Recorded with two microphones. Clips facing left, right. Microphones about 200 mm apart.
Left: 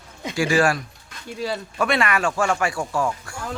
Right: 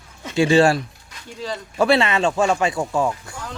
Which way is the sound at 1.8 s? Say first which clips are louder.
Right 5 dB; 25° right (ahead or behind).